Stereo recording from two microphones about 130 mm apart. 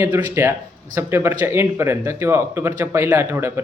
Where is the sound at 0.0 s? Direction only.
15° right (ahead or behind).